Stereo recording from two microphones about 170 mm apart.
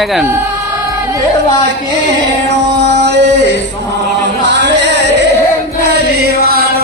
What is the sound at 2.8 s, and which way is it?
Music, 90° right.